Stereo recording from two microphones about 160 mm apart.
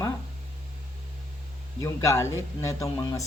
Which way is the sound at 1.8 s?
20° left (ahead or behind).